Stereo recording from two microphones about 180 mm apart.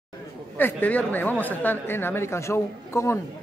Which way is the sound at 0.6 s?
10° left (ahead or behind).